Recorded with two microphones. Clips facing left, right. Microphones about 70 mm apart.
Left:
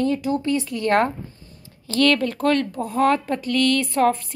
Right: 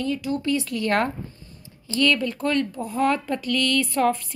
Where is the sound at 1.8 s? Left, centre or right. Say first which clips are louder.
Left 3 dB; left.